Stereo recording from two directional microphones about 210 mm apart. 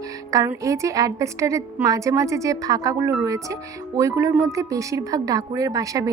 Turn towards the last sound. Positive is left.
turn(degrees=-15)  # may be behind; listen again after turning